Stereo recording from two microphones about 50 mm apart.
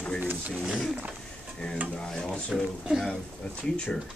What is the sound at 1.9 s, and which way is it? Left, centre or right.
Speech, centre.